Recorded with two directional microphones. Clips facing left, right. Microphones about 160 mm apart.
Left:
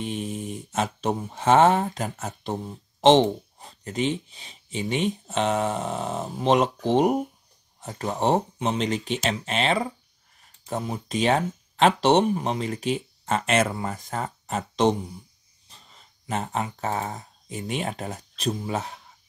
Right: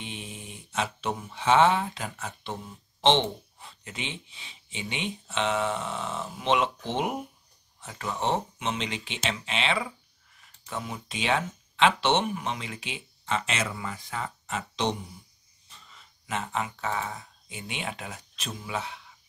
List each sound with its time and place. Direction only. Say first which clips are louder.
0.0 s speech: left 10 dB; 40° left (ahead or behind)